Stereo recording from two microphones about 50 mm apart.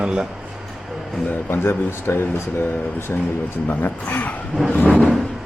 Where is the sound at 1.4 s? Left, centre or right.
Left.